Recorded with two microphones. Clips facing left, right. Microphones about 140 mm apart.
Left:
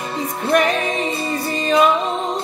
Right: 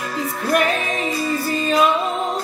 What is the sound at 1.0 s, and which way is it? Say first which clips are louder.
Music: right 1 dB; 25° left (ahead or behind).